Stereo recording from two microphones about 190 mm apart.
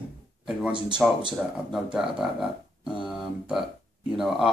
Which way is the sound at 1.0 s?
5° right (ahead or behind).